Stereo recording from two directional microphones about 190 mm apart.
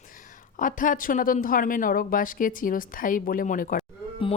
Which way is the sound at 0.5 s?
45° left (ahead or behind).